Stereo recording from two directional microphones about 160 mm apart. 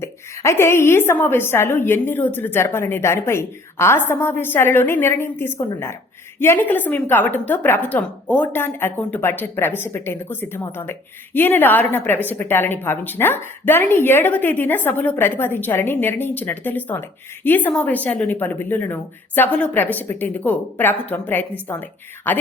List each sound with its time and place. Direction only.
0.0 s a woman's voice: 15° left (ahead or behind)